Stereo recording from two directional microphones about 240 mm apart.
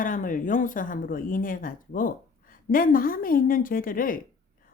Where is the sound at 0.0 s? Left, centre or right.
Left.